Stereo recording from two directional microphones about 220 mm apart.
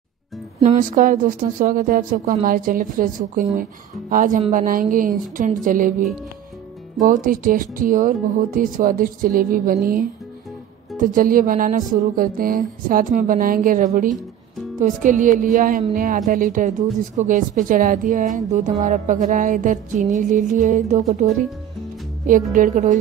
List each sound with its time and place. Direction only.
0.7 s speech: 35° right (ahead or behind)
11.0 s speech: 40° right (ahead or behind)
22.2 s speech: 35° right (ahead or behind)